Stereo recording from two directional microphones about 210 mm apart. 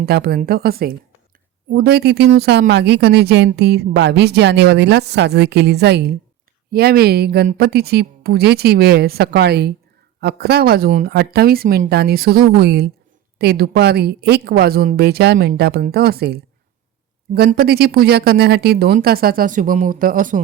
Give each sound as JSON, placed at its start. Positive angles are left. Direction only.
{"t": 0.0, "sound": "speech", "side_deg": -50}